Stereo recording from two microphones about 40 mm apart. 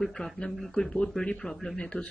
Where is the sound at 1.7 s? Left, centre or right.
Left.